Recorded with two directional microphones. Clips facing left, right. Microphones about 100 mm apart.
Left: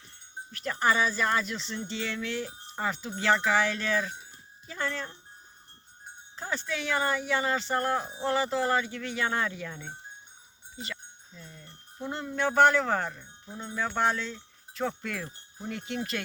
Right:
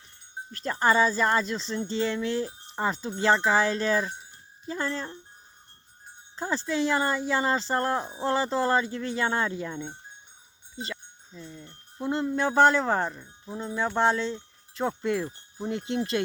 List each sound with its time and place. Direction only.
0.5 s speech: 35° right (ahead or behind)
6.3 s speech: 30° right (ahead or behind)
10.8 s a sound: 30° right (ahead or behind)
12.1 s wind chime: 30° right (ahead or behind)